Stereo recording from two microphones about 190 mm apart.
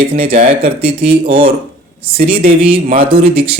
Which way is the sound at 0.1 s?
30° right (ahead or behind).